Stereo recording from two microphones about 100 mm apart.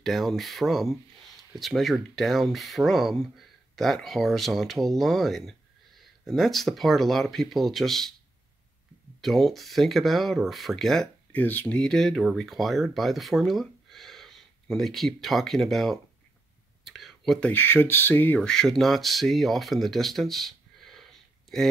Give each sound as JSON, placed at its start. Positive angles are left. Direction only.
{"t": 0.0, "sound": "speech", "side_deg": 0}
{"t": 9.2, "sound": "speech", "side_deg": 0}
{"t": 11.3, "sound": "speech", "side_deg": 15}
{"t": 16.8, "sound": "a sound", "side_deg": 0}
{"t": 17.5, "sound": "speech", "side_deg": 20}
{"t": 18.5, "sound": "speech", "side_deg": 5}